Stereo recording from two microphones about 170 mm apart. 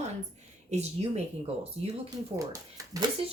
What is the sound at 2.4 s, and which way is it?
Speech, 20° right (ahead or behind).